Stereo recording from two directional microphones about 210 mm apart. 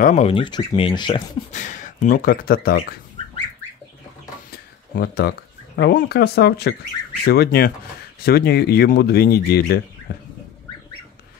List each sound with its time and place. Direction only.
0.0 s speech: 30° left (ahead or behind)
1.5 s speech: 35° left (ahead or behind)
4.5 s a sound: 45° left (ahead or behind)
5.8 s speech: 50° left (ahead or behind)